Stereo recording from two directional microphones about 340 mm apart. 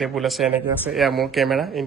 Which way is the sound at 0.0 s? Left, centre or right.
Centre.